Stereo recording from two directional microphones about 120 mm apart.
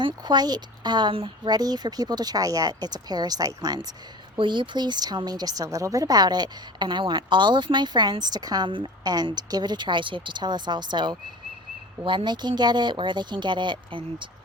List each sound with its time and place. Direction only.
0.0 s speech: 35° right (ahead or behind)
1.5 s speech: 35° right (ahead or behind)